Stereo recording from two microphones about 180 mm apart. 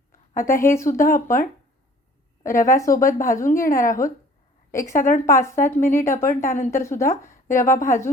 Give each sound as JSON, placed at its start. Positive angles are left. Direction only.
{"t": 0.1, "sound": "a sound", "side_deg": 50}
{"t": 0.6, "sound": "a woman's voice", "side_deg": 15}
{"t": 0.9, "sound": "a woman's voice", "side_deg": 50}
{"t": 4.9, "sound": "speech", "side_deg": 45}
{"t": 5.2, "sound": "a woman's voice", "side_deg": 15}
{"t": 7.4, "sound": "speech", "side_deg": 45}
{"t": 7.7, "sound": "a woman's voice", "side_deg": 15}